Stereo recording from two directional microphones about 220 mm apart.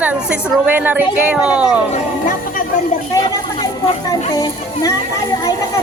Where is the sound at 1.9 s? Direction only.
35° left (ahead or behind).